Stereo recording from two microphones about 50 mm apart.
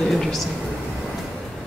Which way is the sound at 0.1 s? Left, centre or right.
Centre.